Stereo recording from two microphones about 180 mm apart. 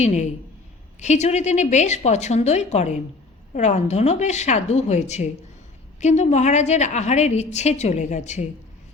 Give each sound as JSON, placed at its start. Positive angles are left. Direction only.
{"t": 0.0, "sound": "a woman's voice", "side_deg": 40}